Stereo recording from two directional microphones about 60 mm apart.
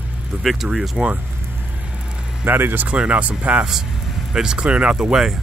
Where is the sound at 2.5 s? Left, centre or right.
Right.